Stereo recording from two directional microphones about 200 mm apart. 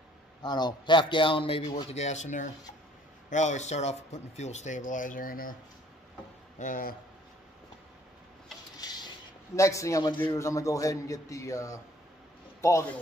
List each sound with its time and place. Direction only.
0.4 s a man's voice: 20° left (ahead or behind); by 5.6 s 45° left (ahead or behind)
6.6 s speech: 45° left (ahead or behind)
8.8 s a sound: 20° left (ahead or behind)
9.6 s a man's voice: 15° left (ahead or behind)